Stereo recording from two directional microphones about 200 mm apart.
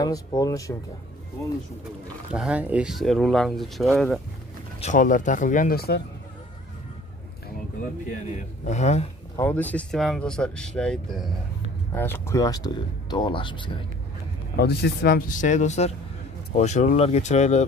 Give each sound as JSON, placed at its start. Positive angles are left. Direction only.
{"t": 0.0, "sound": "speech", "side_deg": 20}
{"t": 2.3, "sound": "speech", "side_deg": -5}
{"t": 4.7, "sound": "speech", "side_deg": 35}
{"t": 8.4, "sound": "speech", "side_deg": 35}
{"t": 9.4, "sound": "speech", "side_deg": 10}
{"t": 14.6, "sound": "speech", "side_deg": 50}